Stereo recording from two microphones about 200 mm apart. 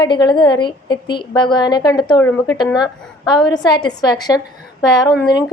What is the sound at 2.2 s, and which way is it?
A woman's voice, 10° left (ahead or behind).